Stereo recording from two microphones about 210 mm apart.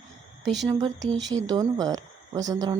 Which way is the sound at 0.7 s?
20° right (ahead or behind).